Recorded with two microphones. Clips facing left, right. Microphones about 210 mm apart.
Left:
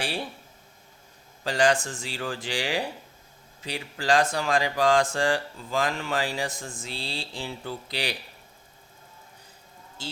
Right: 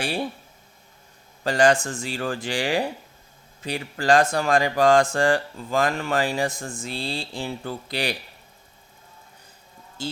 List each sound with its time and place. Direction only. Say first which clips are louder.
1.5 s speech: right 4 dB; 45° right (ahead or behind)
10.0 s speech: right 7 dB; 45° right (ahead or behind)